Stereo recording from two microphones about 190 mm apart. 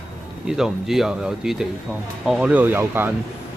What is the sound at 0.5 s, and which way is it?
Speech, centre (ahead or behind).